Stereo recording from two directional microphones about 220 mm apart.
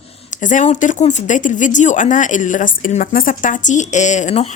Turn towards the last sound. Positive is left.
turn(degrees=30)  # may be behind; listen again after turning